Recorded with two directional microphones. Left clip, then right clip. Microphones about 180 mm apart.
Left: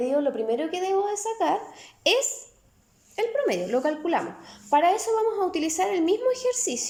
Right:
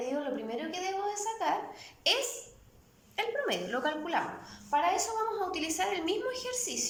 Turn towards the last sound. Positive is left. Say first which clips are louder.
# left 9 dB
turn(degrees=40)  # may be behind; listen again after turning